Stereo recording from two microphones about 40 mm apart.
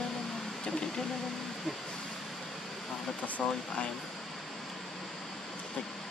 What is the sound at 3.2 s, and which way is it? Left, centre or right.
Speech, left.